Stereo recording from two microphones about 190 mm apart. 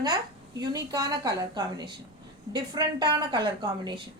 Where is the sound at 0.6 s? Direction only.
20° right (ahead or behind).